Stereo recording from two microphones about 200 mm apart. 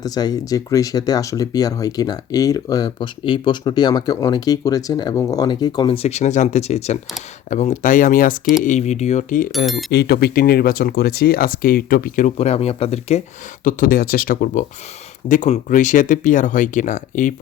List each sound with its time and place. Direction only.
0.0 s speech: 20° left (ahead or behind); by 9.5 s 40° left (ahead or behind)
9.9 s speech: 55° left (ahead or behind); by 13.2 s 35° left (ahead or behind)
13.7 s speech: 45° left (ahead or behind)